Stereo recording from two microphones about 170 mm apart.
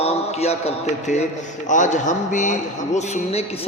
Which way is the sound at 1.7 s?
45° left (ahead or behind).